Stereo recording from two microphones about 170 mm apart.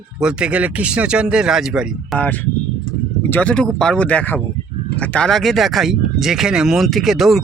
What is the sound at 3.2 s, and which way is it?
Speech, 10° left (ahead or behind).